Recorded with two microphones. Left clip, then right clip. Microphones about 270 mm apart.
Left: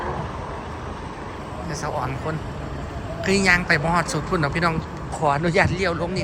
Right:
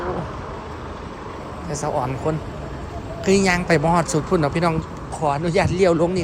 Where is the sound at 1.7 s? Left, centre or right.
Right.